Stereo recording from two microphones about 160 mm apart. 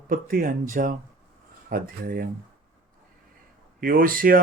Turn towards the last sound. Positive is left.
turn(degrees=-60)  # may be behind; listen again after turning